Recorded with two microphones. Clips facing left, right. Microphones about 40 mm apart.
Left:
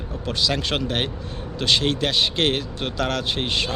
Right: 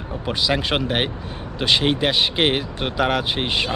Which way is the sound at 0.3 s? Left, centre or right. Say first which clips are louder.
Right 2 dB; centre.